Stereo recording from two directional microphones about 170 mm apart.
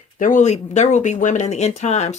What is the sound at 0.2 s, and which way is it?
Speech, 50° left (ahead or behind).